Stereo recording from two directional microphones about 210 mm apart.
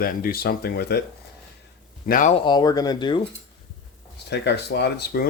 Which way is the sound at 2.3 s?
20° left (ahead or behind).